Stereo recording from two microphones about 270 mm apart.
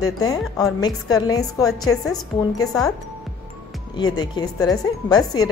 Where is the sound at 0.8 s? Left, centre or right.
Centre.